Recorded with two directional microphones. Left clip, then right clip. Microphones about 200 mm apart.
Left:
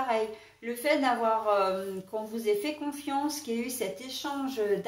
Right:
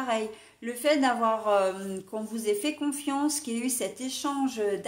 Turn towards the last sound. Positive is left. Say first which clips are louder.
# right 2 dB
turn(degrees=-50)  # may be behind; listen again after turning